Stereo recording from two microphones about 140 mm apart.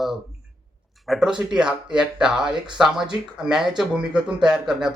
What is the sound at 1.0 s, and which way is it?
Speech, centre (ahead or behind).